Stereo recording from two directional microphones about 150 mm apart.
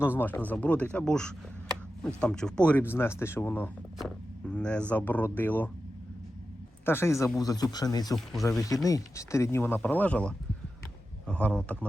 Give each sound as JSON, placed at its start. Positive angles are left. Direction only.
{"t": 0.2, "sound": "speech", "side_deg": 10}
{"t": 6.8, "sound": "speech", "side_deg": 15}
{"t": 8.1, "sound": "speech", "side_deg": 0}
{"t": 8.7, "sound": "speech", "side_deg": 20}